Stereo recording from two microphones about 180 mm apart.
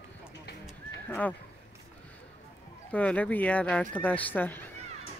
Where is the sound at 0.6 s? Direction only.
5° left (ahead or behind).